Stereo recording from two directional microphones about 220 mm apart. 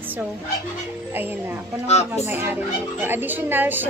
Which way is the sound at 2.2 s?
10° right (ahead or behind).